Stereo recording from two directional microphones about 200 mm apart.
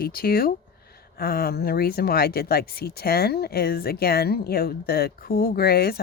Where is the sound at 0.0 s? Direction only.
50° left (ahead or behind).